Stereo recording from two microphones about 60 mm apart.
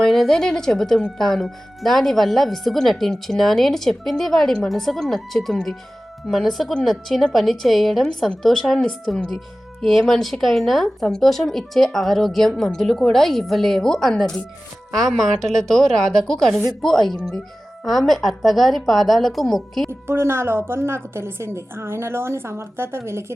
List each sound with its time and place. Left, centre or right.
0.0 s a woman's voice: centre
19.9 s a woman's voice: right